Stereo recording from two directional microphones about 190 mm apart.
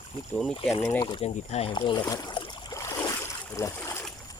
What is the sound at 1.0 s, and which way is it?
Rowboat, 30° left (ahead or behind).